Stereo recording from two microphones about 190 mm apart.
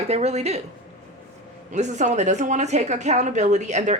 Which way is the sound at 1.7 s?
40° right (ahead or behind).